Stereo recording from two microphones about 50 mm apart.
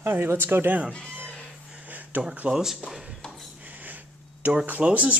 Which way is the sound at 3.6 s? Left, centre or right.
Right.